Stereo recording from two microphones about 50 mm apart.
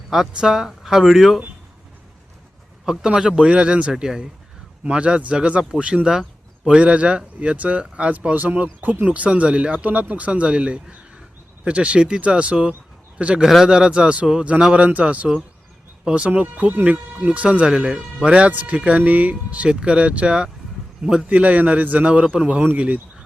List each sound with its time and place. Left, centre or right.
0.3 s a man's voice: centre
2.8 s speech: centre
4.8 s a man's voice: right
13.4 s a man's voice: centre; by 17.7 s right
17.7 s speech: centre; by 19.6 s right
19.6 s speech: centre